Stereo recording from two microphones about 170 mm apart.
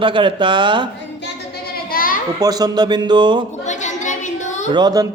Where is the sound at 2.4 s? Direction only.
20° right (ahead or behind).